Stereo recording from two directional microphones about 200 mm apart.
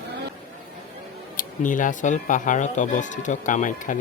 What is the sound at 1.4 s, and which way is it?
Speech, 40° left (ahead or behind).